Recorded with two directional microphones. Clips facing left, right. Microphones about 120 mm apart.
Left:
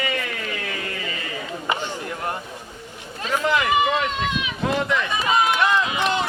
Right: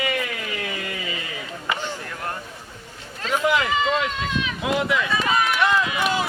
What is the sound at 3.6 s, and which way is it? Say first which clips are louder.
Run: left 2 dB; 15° left (ahead or behind).